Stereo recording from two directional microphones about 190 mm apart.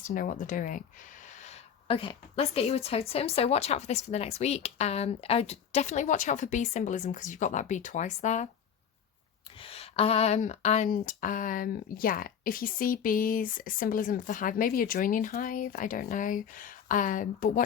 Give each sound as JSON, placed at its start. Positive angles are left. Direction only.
{"t": 0.1, "sound": "speech", "side_deg": 45}
{"t": 9.6, "sound": "speech", "side_deg": 30}